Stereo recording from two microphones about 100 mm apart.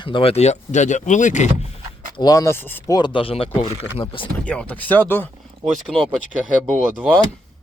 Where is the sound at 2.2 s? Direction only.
35° left (ahead or behind).